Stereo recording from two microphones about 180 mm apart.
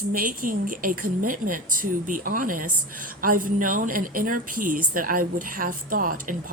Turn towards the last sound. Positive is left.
turn(degrees=-50)  # may be behind; listen again after turning